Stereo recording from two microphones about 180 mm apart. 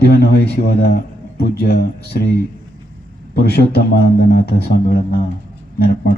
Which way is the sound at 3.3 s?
60° left (ahead or behind).